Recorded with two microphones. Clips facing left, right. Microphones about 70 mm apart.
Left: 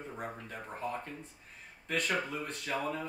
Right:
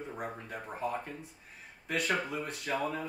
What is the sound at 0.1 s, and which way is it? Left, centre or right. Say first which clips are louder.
Speech: right 2 dB; centre.